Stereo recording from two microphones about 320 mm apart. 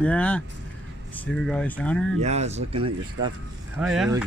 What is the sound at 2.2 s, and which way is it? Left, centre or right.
Speech, right.